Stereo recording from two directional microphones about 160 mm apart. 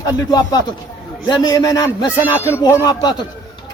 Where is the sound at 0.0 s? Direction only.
25° left (ahead or behind).